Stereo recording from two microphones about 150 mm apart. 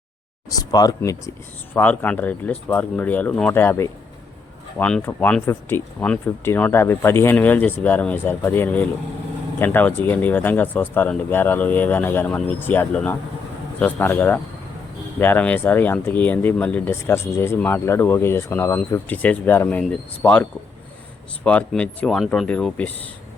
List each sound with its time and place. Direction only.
0.6 s speech: 25° left (ahead or behind)
1.7 s speech: 10° left (ahead or behind)